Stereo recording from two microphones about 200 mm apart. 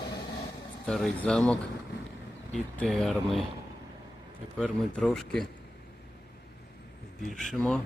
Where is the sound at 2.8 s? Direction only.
Centre (ahead or behind).